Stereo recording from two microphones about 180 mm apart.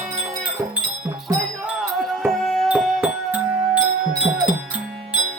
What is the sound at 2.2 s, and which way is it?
Music, centre (ahead or behind).